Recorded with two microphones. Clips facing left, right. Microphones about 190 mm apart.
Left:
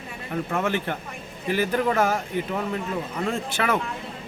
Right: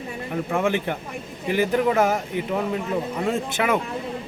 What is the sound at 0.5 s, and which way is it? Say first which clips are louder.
A man's voice: right 3 dB; 15° right (ahead or behind).